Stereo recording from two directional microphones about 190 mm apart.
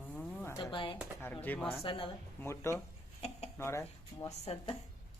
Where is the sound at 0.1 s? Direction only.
5° left (ahead or behind).